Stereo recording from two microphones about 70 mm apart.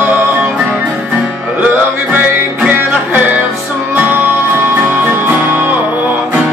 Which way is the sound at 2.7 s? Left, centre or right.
Right.